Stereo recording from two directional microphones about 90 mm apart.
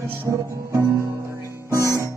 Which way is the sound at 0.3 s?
35° right (ahead or behind).